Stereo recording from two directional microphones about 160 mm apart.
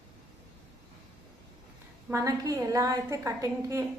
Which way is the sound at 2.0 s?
20° right (ahead or behind).